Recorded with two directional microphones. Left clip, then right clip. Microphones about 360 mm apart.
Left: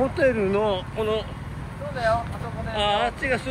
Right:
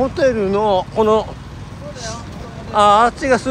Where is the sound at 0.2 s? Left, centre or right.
Centre.